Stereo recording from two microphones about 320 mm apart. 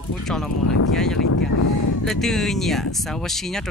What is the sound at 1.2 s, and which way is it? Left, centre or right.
Speech, left.